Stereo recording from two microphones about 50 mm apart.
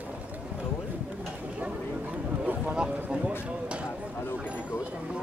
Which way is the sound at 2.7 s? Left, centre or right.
Centre.